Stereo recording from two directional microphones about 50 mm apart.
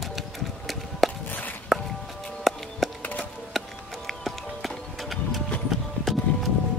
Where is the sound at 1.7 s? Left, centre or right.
Centre.